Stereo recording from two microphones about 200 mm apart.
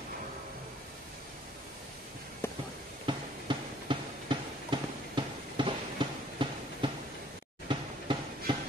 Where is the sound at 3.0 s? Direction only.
25° right (ahead or behind).